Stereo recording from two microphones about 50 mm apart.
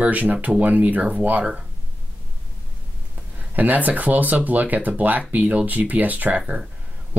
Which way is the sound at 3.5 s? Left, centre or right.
Right.